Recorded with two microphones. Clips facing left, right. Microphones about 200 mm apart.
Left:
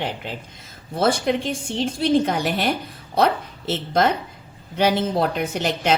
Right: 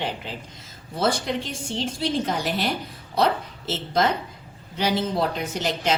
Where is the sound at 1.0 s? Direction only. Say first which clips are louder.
Left 4 dB; 55° left (ahead or behind).